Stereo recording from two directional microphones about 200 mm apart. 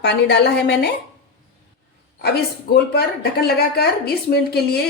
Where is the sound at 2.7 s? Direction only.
50° left (ahead or behind).